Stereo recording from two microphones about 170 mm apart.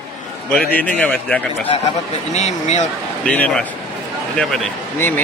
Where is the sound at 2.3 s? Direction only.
40° left (ahead or behind).